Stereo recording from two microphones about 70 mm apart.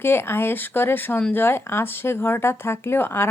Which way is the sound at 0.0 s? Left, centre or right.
Left.